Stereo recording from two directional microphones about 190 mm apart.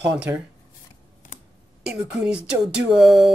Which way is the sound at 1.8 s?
10° right (ahead or behind).